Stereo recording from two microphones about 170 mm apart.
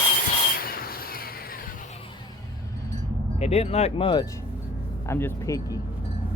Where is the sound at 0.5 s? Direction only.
60° left (ahead or behind).